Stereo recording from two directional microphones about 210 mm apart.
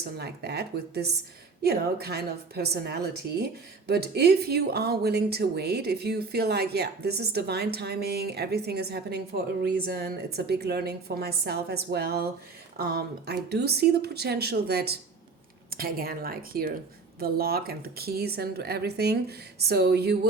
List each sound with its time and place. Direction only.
0.2 s speech: 50° right (ahead or behind)